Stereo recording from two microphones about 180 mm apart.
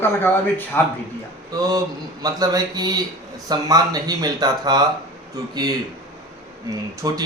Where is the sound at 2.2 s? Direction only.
20° right (ahead or behind).